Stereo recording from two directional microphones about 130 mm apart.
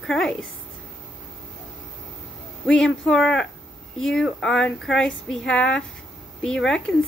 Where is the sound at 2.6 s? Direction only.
5° left (ahead or behind).